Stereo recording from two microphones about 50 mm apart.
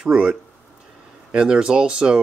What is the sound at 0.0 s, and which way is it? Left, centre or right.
Speech, centre.